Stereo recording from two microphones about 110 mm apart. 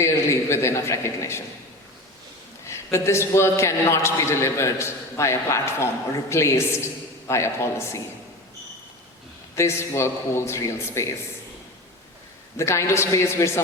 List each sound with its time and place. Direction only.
0.0 s a man's voice: 25° left (ahead or behind)
2.6 s a man's voice: 25° left (ahead or behind)
9.6 s a man's voice: 25° left (ahead or behind)
12.5 s a man's voice: 25° left (ahead or behind)